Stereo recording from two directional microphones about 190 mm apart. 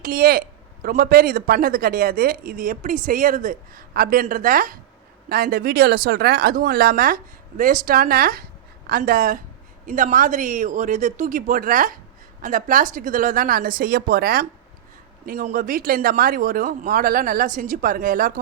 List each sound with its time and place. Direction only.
0.0 s a woman's voice: 50° right (ahead or behind)
15.4 s a woman's voice: 45° right (ahead or behind)